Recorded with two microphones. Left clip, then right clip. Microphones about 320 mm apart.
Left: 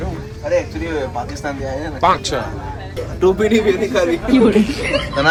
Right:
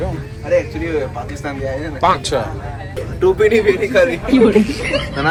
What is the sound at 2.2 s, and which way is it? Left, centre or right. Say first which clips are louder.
Speech: right 2 dB; centre.